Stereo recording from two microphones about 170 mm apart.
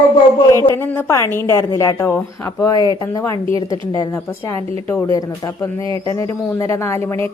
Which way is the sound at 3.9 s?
20° left (ahead or behind).